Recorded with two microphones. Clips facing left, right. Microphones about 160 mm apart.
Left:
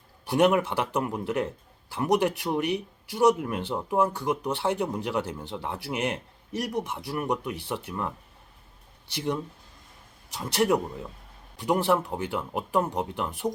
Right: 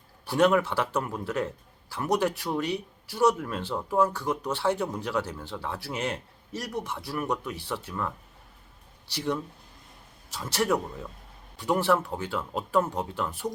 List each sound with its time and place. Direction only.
0.3 s speech: 20° left (ahead or behind)
9.1 s speech: 20° left (ahead or behind)